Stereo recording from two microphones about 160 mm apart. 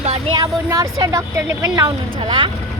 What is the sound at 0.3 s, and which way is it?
Speech, 20° right (ahead or behind).